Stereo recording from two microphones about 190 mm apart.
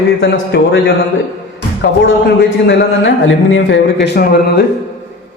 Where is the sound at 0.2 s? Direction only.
65° left (ahead or behind).